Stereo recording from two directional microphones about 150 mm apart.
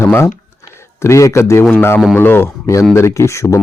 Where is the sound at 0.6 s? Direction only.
20° left (ahead or behind).